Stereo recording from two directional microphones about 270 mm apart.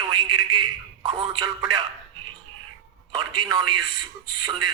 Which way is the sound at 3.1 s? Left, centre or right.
Centre.